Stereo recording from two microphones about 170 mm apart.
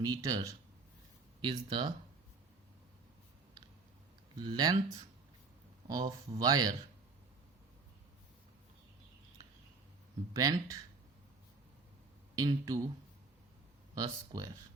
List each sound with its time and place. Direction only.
0.0 s speech: 25° right (ahead or behind)
4.4 s speech: 25° right (ahead or behind)
10.3 s speech: 20° right (ahead or behind)
12.4 s speech: 20° right (ahead or behind)
13.9 s speech: 20° right (ahead or behind)